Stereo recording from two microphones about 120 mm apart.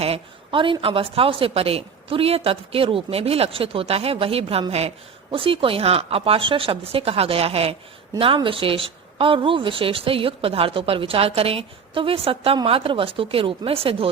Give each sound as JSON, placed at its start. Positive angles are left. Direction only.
{"t": 0.0, "sound": "a woman's voice", "side_deg": -50}